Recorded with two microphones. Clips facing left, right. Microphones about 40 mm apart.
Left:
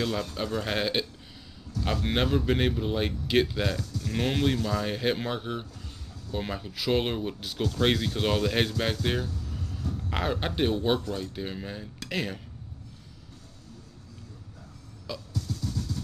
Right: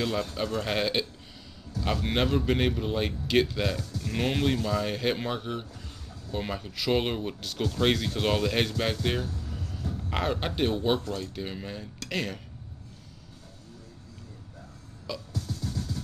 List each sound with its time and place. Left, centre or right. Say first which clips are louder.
0.0 s speech: right 1 dB; centre
9.6 s a sound: left 2 dB; right
10.0 s speech: even; centre
15.3 s music: left 3 dB; right